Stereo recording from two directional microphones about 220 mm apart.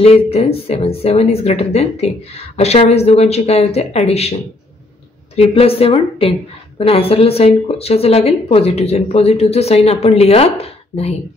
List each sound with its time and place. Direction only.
0.0 s speech: 25° left (ahead or behind)